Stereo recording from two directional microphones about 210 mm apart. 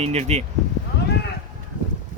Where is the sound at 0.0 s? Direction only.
30° right (ahead or behind).